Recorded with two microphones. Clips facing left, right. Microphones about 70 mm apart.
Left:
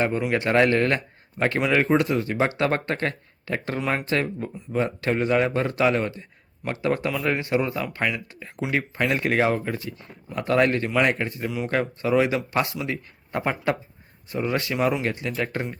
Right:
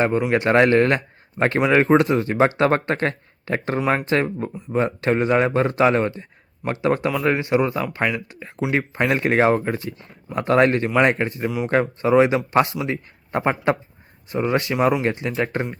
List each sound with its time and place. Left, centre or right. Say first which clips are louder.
0.3 s speech: right 3 dB; right
8.7 s speech: right 3 dB; right